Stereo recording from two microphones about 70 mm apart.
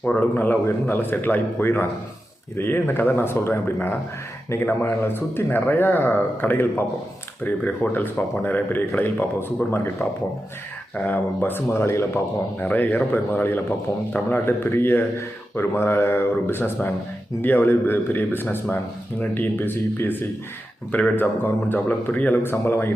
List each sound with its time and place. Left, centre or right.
0.0 s a man's voice: left
12.5 s a man's voice: left